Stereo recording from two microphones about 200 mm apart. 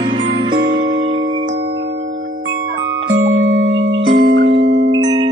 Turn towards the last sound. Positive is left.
turn(degrees=-25)  # may be behind; listen again after turning